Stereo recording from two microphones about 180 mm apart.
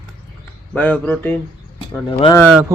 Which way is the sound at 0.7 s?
5° left (ahead or behind).